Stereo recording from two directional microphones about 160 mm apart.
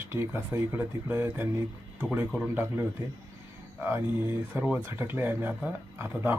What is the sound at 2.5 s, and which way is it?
Speech, 15° right (ahead or behind).